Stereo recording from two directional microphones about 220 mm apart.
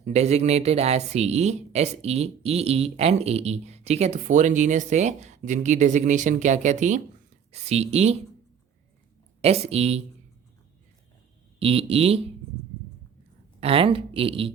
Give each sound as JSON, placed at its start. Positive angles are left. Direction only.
{"t": 0.0, "sound": "speech", "side_deg": -30}
{"t": 9.4, "sound": "speech", "side_deg": -30}
{"t": 11.6, "sound": "speech", "side_deg": -25}
{"t": 13.6, "sound": "speech", "side_deg": -25}